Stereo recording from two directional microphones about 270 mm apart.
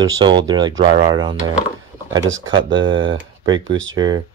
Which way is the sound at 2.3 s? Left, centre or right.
Right.